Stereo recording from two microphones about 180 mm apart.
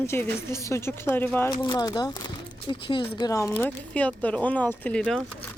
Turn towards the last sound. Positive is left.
turn(degrees=5)  # may be behind; listen again after turning